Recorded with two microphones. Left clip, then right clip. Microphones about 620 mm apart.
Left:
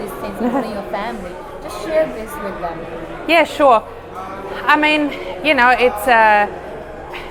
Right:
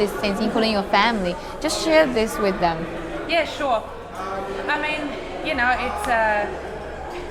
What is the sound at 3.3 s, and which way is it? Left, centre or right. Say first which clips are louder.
A woman's voice: left 10 dB; left.